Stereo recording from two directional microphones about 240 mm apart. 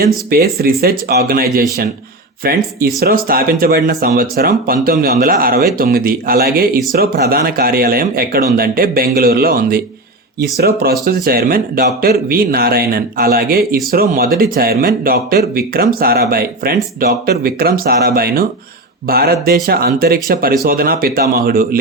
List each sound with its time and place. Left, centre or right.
0.0 s speech: right